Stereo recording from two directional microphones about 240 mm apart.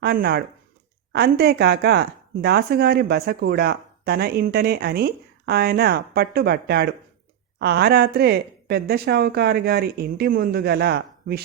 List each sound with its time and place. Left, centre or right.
0.0 s speech: right